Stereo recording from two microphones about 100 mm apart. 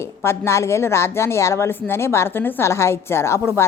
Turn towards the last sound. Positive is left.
turn(degrees=25)  # may be behind; listen again after turning